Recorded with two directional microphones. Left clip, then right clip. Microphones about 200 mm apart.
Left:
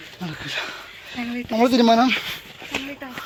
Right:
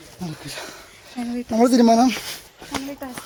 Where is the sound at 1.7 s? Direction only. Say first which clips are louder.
Even; 40° right (ahead or behind).